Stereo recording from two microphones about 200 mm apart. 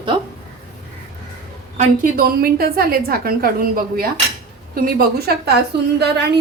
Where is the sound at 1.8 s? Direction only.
45° right (ahead or behind).